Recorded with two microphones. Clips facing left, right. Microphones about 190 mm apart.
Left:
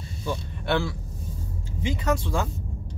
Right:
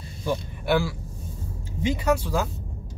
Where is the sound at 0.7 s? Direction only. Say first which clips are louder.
Right 2 dB; 5° right (ahead or behind).